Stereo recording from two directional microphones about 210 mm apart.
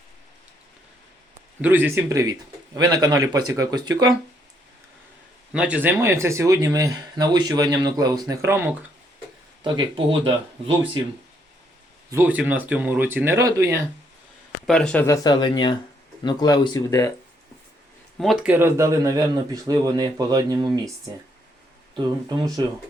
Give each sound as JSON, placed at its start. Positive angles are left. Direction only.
{"t": 1.6, "sound": "speech", "side_deg": -10}
{"t": 5.5, "sound": "speech", "side_deg": -5}
{"t": 9.6, "sound": "speech", "side_deg": -25}
{"t": 12.1, "sound": "speech", "side_deg": -10}
{"t": 14.7, "sound": "speech", "side_deg": 5}
{"t": 15.0, "sound": "speech", "side_deg": 15}
{"t": 18.2, "sound": "speech", "side_deg": 0}
{"t": 18.5, "sound": "speech", "side_deg": -10}